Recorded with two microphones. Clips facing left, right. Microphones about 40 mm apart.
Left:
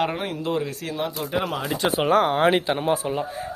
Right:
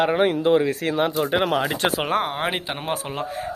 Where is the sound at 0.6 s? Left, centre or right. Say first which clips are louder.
Right 6 dB; right.